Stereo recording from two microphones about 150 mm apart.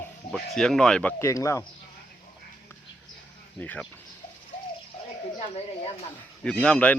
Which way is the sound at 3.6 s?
10° left (ahead or behind).